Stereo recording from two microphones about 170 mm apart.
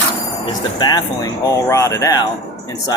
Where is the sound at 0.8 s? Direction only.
25° left (ahead or behind).